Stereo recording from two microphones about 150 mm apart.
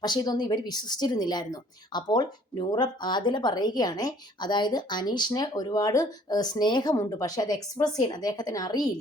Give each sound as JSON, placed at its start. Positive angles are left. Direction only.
{"t": 0.0, "sound": "a woman's voice", "side_deg": 25}